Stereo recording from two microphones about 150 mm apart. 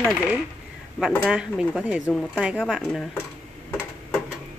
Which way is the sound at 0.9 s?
Centre (ahead or behind).